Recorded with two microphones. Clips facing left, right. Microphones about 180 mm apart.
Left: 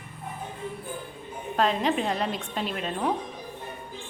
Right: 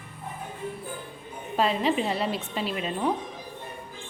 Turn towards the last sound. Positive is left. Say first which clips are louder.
# right 1 dB
turn(degrees=-5)  # may be behind; listen again after turning